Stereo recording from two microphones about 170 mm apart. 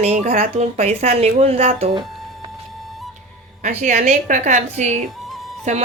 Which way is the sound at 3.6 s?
45° right (ahead or behind).